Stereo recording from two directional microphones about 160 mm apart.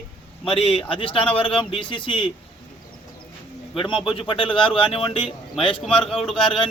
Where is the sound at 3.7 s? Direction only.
30° left (ahead or behind).